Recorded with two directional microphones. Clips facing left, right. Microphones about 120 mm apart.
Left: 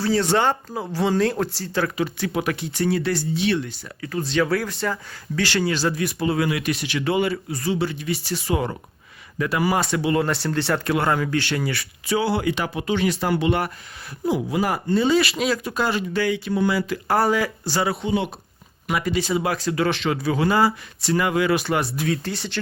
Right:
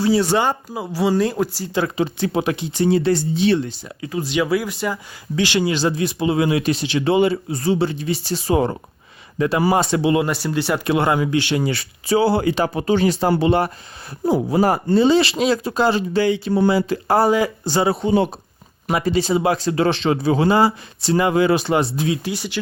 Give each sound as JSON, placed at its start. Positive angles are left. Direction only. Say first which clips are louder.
{"t": 0.0, "sound": "speech", "louder": "right 3 dB", "side_deg": -10}
{"t": 1.7, "sound": "speech", "louder": "right 2 dB", "side_deg": -20}
{"t": 10.2, "sound": "speech", "louder": "right 2 dB", "side_deg": -10}
{"t": 10.8, "sound": "speech", "louder": "right 3 dB", "side_deg": -20}